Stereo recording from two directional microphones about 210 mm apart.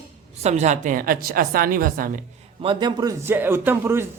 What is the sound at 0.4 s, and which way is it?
Speech, 30° right (ahead or behind).